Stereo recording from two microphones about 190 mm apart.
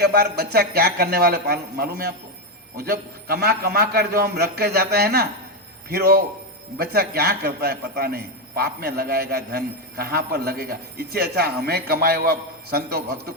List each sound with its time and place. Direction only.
0.0 s a man's voice: 55° right (ahead or behind)